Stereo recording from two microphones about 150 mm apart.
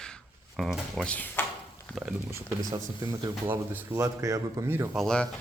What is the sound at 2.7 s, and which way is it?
Speech, 25° right (ahead or behind).